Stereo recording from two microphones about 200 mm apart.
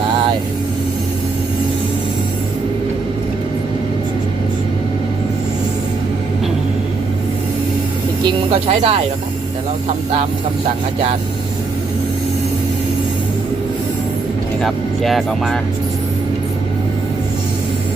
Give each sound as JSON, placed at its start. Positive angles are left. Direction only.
{"t": 8.8, "sound": "speech", "side_deg": -35}
{"t": 14.6, "sound": "speech", "side_deg": 0}